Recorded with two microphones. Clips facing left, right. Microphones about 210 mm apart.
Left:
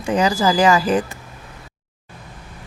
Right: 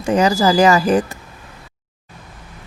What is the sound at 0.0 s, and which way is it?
A woman's voice, 45° right (ahead or behind).